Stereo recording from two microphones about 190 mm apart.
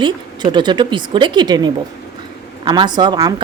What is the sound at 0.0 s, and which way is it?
A woman's voice, 25° right (ahead or behind).